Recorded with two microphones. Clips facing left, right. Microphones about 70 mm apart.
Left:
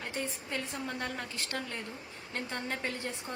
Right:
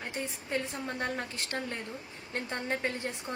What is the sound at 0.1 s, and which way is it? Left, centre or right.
A woman's voice, right.